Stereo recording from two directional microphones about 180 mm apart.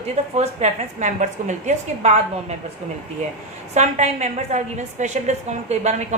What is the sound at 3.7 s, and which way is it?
A woman's voice, 40° right (ahead or behind).